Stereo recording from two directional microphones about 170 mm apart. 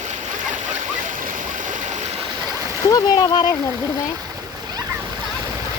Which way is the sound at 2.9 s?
25° left (ahead or behind).